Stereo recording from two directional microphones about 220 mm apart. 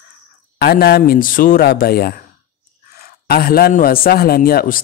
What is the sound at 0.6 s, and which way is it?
A man's voice, 45° left (ahead or behind).